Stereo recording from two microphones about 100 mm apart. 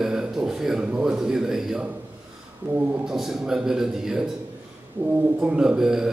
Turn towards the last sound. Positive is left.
turn(degrees=-5)  # may be behind; listen again after turning